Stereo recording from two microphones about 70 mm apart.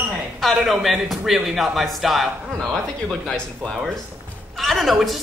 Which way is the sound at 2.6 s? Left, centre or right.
Centre.